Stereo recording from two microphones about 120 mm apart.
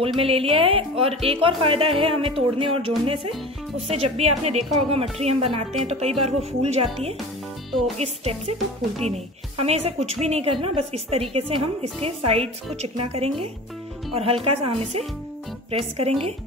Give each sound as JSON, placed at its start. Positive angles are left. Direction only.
{"t": 0.0, "sound": "speech", "side_deg": -50}
{"t": 3.9, "sound": "speech", "side_deg": -60}
{"t": 9.6, "sound": "speech", "side_deg": -55}